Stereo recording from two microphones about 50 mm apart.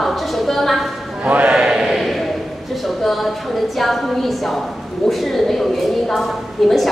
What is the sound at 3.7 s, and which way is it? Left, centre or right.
A woman's voice, centre.